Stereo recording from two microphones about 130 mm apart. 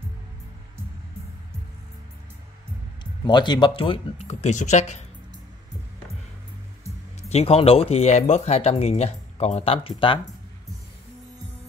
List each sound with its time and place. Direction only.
3.0 s speech: 35° left (ahead or behind)
4.3 s speech: 60° left (ahead or behind)
7.2 s speech: 50° left (ahead or behind)